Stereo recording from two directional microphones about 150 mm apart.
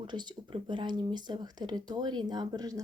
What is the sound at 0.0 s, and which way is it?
Speech, 30° right (ahead or behind).